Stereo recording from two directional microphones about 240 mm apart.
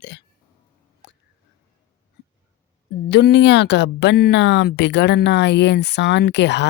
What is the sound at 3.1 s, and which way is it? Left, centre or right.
Speech, left.